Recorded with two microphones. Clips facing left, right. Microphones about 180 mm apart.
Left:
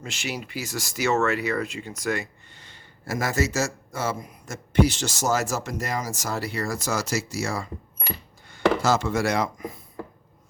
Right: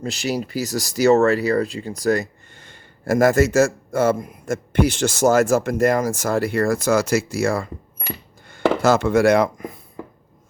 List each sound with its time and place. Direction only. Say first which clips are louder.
0.0 s speech: right 9 dB; 35° right (ahead or behind); by 9.7 s 55° right (ahead or behind)